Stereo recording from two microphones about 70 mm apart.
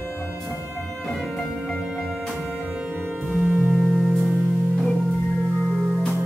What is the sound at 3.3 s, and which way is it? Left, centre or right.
Music, centre.